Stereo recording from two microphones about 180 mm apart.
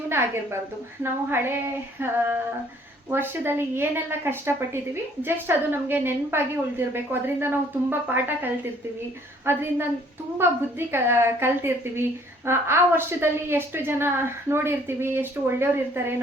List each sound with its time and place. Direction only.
0.1 s a woman's voice: 15° right (ahead or behind)
9.5 s a woman's voice: 15° right (ahead or behind)